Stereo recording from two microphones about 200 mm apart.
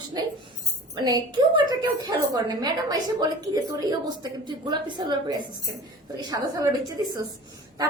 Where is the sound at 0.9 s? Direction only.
20° right (ahead or behind).